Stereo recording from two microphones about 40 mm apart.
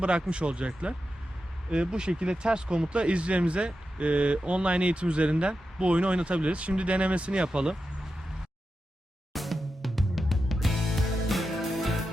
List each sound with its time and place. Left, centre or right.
0.0 s speech: right
9.3 s music: centre